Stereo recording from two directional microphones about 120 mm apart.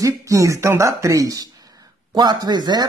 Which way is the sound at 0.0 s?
25° right (ahead or behind).